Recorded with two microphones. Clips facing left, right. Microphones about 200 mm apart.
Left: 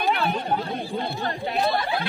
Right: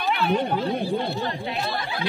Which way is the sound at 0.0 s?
45° left (ahead or behind).